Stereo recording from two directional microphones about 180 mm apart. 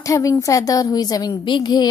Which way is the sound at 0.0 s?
15° left (ahead or behind).